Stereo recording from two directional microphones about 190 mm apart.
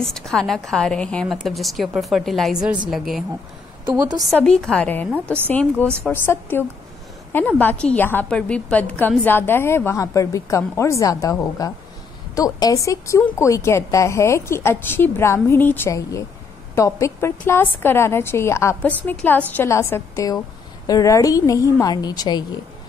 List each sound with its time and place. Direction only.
0.0 s a woman's voice: centre (ahead or behind)
3.8 s a woman's voice: 20° right (ahead or behind)
4.4 s a woman's voice: 5° left (ahead or behind)
5.1 s speech: 10° right (ahead or behind)
5.5 s a woman's voice: 5° left (ahead or behind)